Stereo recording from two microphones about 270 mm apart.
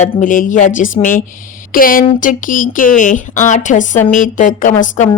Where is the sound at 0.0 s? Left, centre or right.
Left.